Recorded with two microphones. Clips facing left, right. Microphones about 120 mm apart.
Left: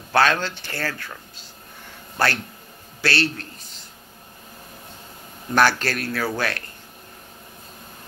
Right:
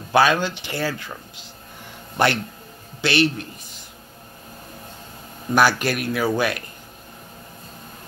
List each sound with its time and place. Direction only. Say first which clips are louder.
0.1 s speech: right 2 dB; 10° right (ahead or behind)
5.5 s speech: right 1 dB; 10° right (ahead or behind)